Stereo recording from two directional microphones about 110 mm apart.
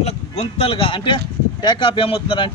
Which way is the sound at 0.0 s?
70° left (ahead or behind).